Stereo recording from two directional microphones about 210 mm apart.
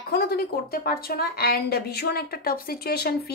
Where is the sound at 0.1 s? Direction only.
45° left (ahead or behind).